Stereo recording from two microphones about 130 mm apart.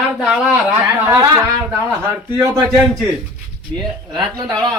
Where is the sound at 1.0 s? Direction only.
25° right (ahead or behind).